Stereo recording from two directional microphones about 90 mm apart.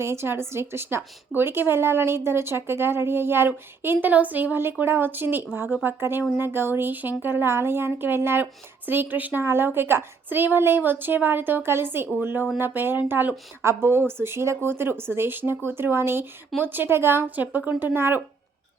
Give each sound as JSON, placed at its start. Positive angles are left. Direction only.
{"t": 0.0, "sound": "a woman's voice", "side_deg": -30}